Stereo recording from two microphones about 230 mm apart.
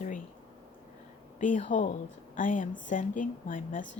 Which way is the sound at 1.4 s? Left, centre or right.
Left.